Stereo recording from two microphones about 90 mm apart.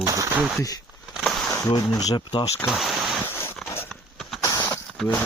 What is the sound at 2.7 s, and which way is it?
Speech, 5° right (ahead or behind).